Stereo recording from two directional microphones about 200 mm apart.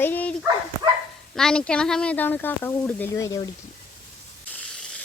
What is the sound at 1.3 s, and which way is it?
Speech, 5° left (ahead or behind).